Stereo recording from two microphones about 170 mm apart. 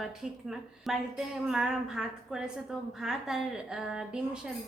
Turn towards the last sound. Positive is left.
turn(degrees=-5)  # may be behind; listen again after turning